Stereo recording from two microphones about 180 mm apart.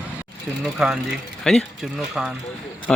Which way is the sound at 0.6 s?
5° right (ahead or behind).